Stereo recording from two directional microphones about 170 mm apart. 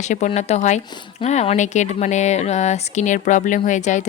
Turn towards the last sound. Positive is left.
turn(degrees=45)  # may be behind; listen again after turning